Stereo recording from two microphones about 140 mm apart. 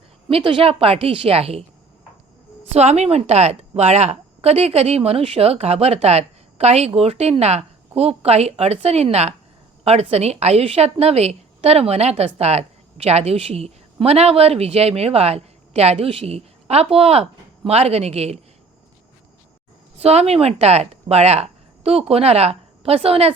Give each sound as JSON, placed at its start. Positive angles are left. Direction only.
{"t": 0.3, "sound": "a woman's voice", "side_deg": -40}
{"t": 2.7, "sound": "a woman's voice", "side_deg": -50}
{"t": 20.0, "sound": "speech", "side_deg": -50}